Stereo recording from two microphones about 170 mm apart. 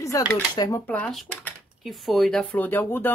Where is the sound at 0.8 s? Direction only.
5° left (ahead or behind).